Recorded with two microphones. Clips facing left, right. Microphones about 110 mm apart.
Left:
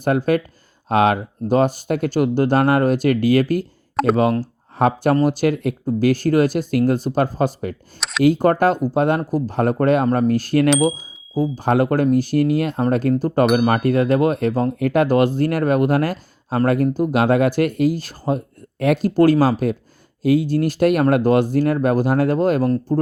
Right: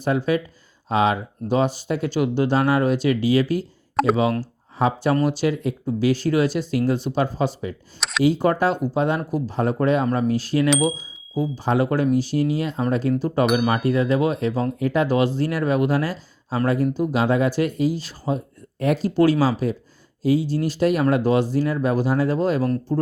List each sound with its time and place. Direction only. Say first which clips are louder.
0.0 s speech: left 3 dB; 50° left (ahead or behind)
3.9 s speech: left 2 dB; centre (ahead or behind)
4.2 s speech: left 3 dB; 50° left (ahead or behind)
10.7 s speech: left 2 dB; centre (ahead or behind)
11.5 s speech: left 3 dB; 50° left (ahead or behind)
13.4 s speech: left 4 dB; centre (ahead or behind)
13.7 s speech: left 3 dB; 55° left (ahead or behind)